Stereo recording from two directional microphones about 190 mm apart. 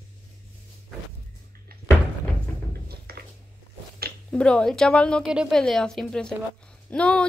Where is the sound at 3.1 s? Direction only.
55° right (ahead or behind).